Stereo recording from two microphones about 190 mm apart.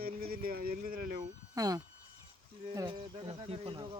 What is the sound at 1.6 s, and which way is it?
Speech, 20° right (ahead or behind).